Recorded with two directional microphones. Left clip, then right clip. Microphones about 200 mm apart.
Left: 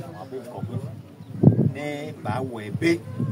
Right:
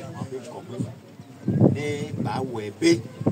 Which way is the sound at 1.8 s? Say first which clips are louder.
Right 2 dB; 15° left (ahead or behind).